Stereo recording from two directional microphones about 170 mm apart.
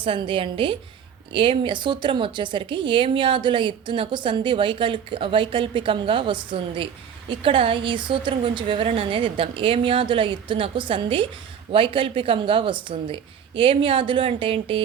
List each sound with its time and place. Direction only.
0.0 s a woman's voice: 30° right (ahead or behind)